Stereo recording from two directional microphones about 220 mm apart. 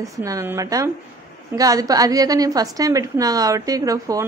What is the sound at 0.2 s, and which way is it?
A woman's voice, 15° right (ahead or behind).